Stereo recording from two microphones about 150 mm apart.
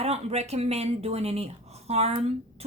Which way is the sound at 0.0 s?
45° right (ahead or behind).